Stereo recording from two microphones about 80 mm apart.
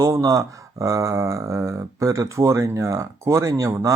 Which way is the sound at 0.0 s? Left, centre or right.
Right.